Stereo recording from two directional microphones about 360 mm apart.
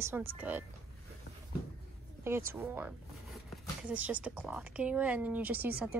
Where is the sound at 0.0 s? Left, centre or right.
Centre.